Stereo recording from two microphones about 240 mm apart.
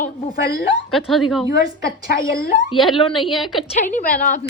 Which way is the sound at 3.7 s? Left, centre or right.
Left.